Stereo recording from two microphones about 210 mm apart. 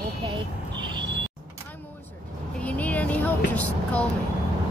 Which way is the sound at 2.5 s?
5° left (ahead or behind).